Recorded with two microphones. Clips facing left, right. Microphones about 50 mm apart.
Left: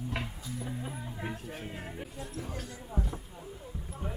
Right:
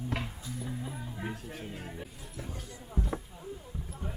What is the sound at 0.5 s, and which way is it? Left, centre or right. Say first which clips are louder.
Music: left 1 dB; centre.